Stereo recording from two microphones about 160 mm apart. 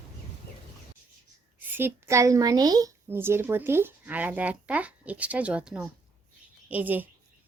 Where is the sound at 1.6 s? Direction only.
15° right (ahead or behind).